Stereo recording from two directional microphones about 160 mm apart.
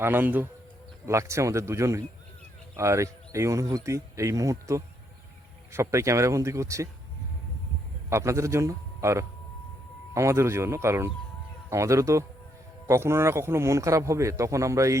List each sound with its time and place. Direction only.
0.0 s a man's voice: 10° right (ahead or behind)
8.1 s a man's voice: 20° right (ahead or behind)